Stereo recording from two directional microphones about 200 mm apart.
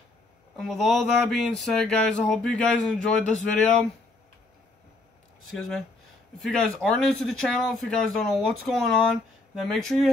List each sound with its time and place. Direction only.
0.6 s speech: centre (ahead or behind)
5.6 s speech: centre (ahead or behind)